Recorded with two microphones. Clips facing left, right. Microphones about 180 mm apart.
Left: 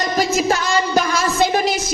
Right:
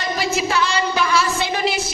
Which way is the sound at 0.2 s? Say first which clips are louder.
Left 2 dB; 45° left (ahead or behind).